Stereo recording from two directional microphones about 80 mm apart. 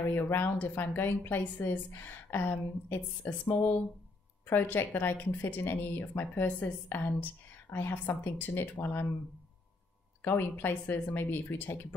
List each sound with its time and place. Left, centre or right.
0.1 s speech: left
10.2 s speech: left